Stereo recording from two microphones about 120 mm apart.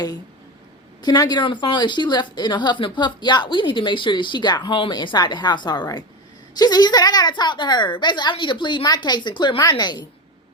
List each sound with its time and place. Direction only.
1.0 s a woman's voice: 35° left (ahead or behind)